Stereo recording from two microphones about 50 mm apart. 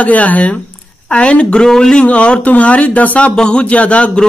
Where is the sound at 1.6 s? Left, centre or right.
Centre.